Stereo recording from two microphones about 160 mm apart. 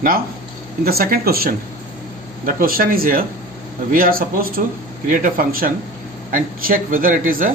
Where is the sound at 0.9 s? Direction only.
70° right (ahead or behind).